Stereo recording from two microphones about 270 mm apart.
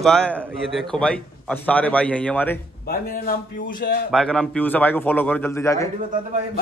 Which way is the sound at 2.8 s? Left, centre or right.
Left.